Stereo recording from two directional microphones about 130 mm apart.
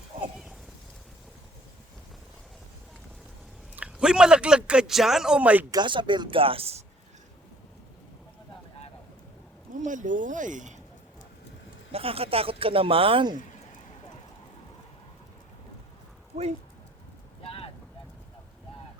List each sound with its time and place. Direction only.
3.8 s speech: 10° right (ahead or behind)
5.7 s speech: 35° right (ahead or behind)
9.7 s speech: 75° right (ahead or behind)
11.9 s speech: 50° right (ahead or behind)
16.3 s speech: 55° right (ahead or behind)
17.4 s vehicle: 45° left (ahead or behind)